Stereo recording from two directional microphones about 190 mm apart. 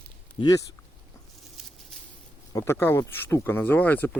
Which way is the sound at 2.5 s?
15° left (ahead or behind).